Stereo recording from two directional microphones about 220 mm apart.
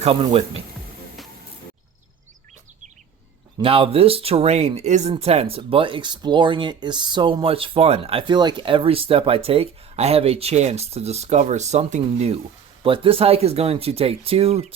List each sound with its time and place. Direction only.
0.0 s speech: 25° right (ahead or behind)
3.6 s speech: 25° right (ahead or behind)